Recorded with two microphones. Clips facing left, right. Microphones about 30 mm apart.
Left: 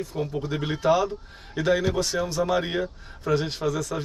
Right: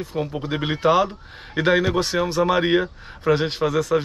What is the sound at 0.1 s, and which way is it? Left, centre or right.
Speech, right.